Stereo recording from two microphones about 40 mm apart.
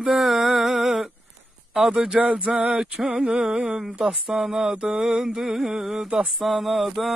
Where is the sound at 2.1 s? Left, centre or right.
Right.